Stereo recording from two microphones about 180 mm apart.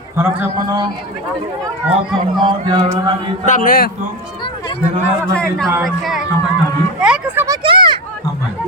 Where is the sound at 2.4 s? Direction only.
25° right (ahead or behind).